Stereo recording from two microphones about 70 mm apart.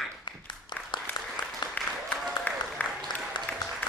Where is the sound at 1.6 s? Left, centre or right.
Left.